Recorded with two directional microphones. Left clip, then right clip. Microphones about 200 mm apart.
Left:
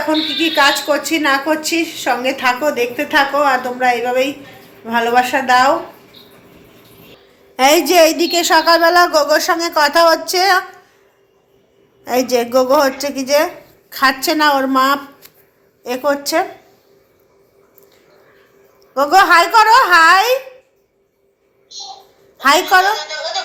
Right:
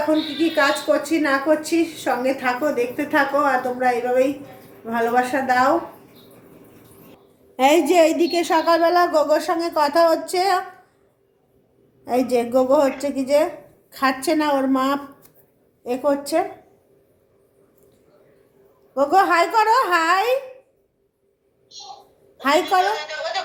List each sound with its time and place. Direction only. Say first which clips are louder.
0.3 s a woman's voice: left 8 dB; 5° right (ahead or behind)
7.5 s a woman's voice: left 5 dB; centre (ahead or behind)
12.6 s a woman's voice: left 4 dB; centre (ahead or behind)
16.0 s a woman's voice: left 4 dB; centre (ahead or behind)
19.1 s a woman's voice: left 8 dB; centre (ahead or behind)
21.7 s a child's voice: left 7 dB; 20° right (ahead or behind)
22.4 s a woman's voice: left 7 dB; centre (ahead or behind)
23.0 s speech: left 4 dB; 20° right (ahead or behind)